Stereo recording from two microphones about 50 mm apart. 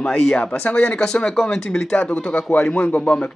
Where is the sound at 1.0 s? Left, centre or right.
Centre; by 3.0 s left.